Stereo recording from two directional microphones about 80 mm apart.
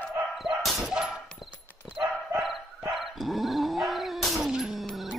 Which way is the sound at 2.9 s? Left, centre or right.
Centre.